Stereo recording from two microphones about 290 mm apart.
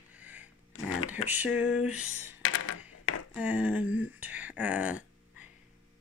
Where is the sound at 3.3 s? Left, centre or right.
Centre.